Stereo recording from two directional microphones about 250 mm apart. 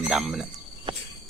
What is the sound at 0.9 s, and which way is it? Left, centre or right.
Cricket, right.